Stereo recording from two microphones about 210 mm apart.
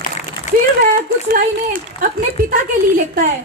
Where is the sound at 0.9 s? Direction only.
40° right (ahead or behind).